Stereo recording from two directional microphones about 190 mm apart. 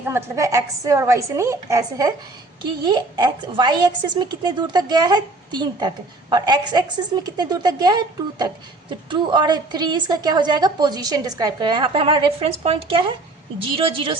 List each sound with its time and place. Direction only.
0.0 s a woman's voice: 10° right (ahead or behind); by 14.2 s 30° right (ahead or behind)